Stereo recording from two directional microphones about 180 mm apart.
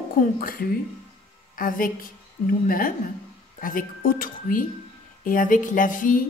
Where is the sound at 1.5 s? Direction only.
50° left (ahead or behind).